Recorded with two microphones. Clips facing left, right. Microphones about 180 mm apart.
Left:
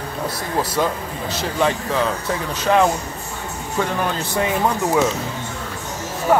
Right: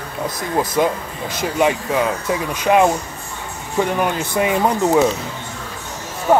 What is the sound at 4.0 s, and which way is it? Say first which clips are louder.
Speech: right 3 dB; 15° right (ahead or behind).